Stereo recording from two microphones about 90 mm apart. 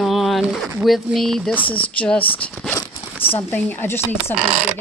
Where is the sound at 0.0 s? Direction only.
Centre (ahead or behind).